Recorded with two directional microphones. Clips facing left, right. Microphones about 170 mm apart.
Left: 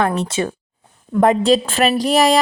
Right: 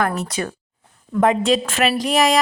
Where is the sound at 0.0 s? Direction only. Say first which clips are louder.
Left 3 dB; 25° left (ahead or behind).